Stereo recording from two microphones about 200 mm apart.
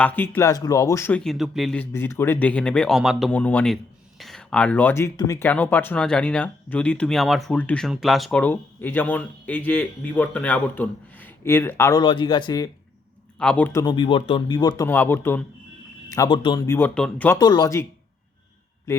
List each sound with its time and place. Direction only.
0.0 s speech: 10° left (ahead or behind)
13.4 s speech: 5° left (ahead or behind)
13.8 s speech: 25° left (ahead or behind)
14.8 s speech: 10° left (ahead or behind)
17.3 s speech: 20° left (ahead or behind)